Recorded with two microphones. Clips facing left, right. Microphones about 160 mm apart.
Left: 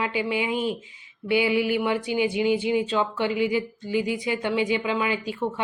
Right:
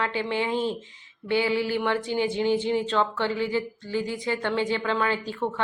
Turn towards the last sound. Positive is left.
turn(degrees=10)  # may be behind; listen again after turning